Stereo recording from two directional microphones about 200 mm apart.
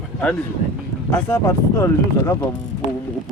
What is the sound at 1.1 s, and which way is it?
Speech, 10° left (ahead or behind).